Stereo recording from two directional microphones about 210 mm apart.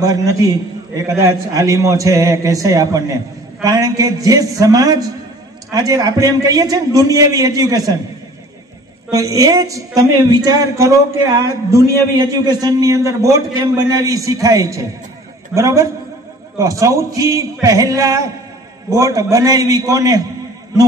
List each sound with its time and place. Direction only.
0.0 s speech: 15° right (ahead or behind)
9.1 s speech: 15° right (ahead or behind)